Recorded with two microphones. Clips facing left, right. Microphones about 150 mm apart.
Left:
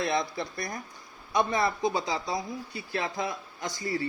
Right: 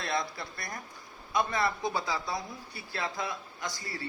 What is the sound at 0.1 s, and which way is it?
Speech, 20° left (ahead or behind).